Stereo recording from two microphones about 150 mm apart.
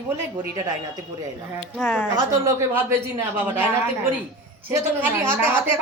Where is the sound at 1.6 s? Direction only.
5° left (ahead or behind).